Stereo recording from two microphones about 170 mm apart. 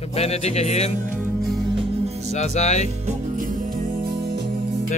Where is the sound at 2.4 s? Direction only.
45° left (ahead or behind).